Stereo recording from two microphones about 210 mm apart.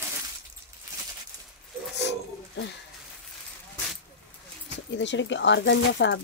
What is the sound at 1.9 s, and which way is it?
Pigeon, 55° left (ahead or behind).